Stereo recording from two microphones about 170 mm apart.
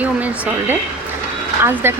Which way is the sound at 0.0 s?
10° right (ahead or behind).